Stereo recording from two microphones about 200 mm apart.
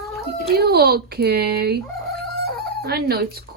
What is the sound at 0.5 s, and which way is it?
Speech, 50° right (ahead or behind).